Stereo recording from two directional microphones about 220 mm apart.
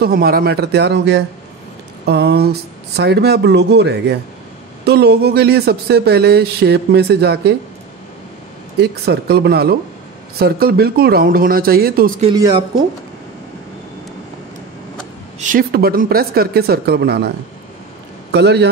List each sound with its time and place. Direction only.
0.0 s speech: 45° right (ahead or behind)
8.7 s speech: 45° right (ahead or behind)
12.4 s speech: 20° right (ahead or behind)
15.5 s speech: 45° right (ahead or behind)
18.3 s speech: 50° right (ahead or behind)